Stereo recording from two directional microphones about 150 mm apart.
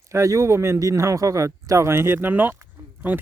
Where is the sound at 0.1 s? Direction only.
20° right (ahead or behind).